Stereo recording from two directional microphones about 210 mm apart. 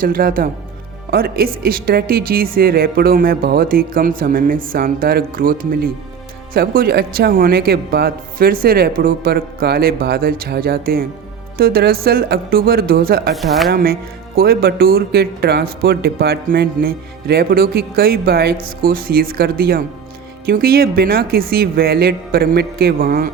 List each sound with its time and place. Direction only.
0.0 s speech: 45° right (ahead or behind)
13.3 s speech: centre (ahead or behind)
13.7 s speech: 45° right (ahead or behind)